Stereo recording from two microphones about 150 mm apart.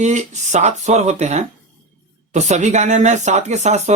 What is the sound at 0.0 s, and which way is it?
Speech, 50° right (ahead or behind).